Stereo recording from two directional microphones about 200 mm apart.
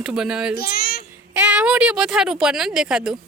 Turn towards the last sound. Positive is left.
turn(degrees=-5)  # may be behind; listen again after turning